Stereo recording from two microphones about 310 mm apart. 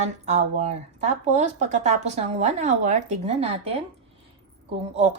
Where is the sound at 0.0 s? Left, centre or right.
Right.